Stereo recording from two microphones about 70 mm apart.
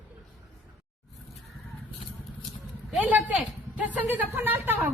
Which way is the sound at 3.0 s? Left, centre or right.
Right.